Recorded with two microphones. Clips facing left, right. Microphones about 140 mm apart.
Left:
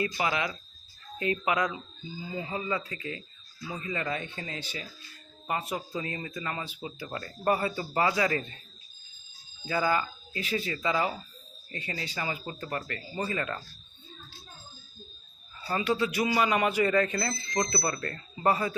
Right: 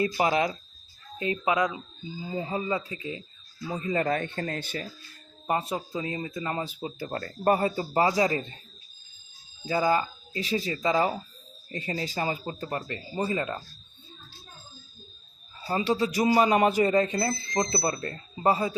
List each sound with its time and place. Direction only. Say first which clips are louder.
0.0 s speech: right 5 dB; 35° right (ahead or behind)
1.2 s speech: right 2 dB; 20° right (ahead or behind)
3.8 s speech: right 7 dB; 40° right (ahead or behind)
5.5 s speech: right 4 dB; 30° right (ahead or behind)
6.5 s speech: right 5 dB; 35° right (ahead or behind)
9.6 s speech: right 3 dB; 30° right (ahead or behind)
15.8 s speech: right 3 dB; 35° right (ahead or behind)